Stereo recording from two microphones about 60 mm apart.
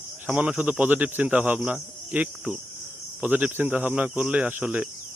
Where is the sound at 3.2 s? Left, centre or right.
Right.